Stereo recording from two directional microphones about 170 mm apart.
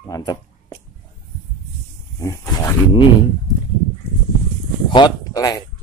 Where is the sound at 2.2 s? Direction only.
20° left (ahead or behind).